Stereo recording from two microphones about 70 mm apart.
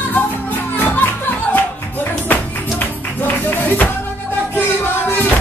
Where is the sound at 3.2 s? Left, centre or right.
Left.